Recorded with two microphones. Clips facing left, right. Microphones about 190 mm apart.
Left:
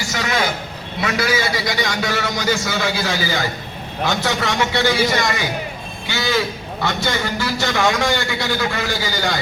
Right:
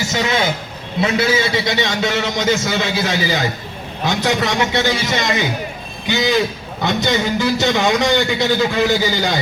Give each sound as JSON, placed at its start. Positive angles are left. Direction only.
{"t": 1.0, "sound": "a man's voice", "side_deg": -25}